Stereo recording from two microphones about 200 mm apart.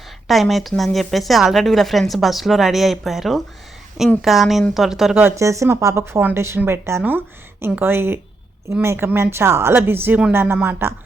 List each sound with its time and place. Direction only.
0.3 s a woman's voice: centre (ahead or behind)